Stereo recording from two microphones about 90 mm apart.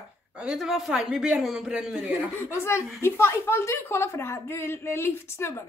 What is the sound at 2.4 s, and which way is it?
A woman's voice, 30° left (ahead or behind).